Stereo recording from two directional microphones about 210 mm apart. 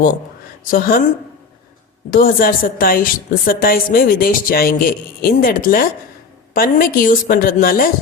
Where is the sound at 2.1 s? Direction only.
45° left (ahead or behind).